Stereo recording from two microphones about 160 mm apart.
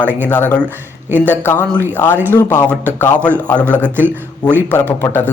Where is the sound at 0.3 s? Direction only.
10° left (ahead or behind).